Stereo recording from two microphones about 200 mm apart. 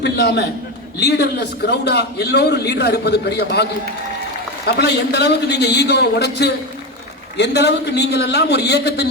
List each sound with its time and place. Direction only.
0.0 s a man's voice: 55° left (ahead or behind)